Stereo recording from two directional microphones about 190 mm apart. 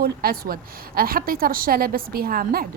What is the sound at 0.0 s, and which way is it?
Speech, 50° right (ahead or behind).